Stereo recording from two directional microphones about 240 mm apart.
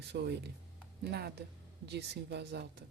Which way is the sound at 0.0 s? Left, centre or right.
Right.